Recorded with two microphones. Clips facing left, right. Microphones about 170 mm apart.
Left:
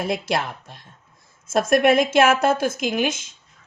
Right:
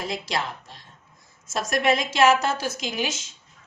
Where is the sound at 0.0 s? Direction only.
55° left (ahead or behind).